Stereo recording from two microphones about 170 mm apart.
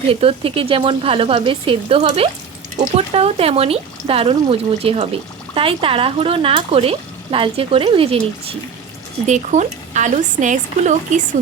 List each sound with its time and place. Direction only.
0.1 s speech: 35° right (ahead or behind)
9.2 s a woman's voice: 45° right (ahead or behind)